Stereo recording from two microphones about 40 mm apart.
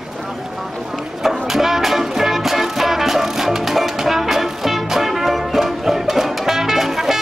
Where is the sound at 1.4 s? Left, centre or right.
Centre.